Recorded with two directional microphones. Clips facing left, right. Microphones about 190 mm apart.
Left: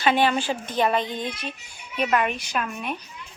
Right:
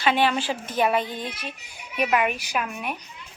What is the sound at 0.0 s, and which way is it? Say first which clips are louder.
Speech: left 1 dB; 45° left (ahead or behind).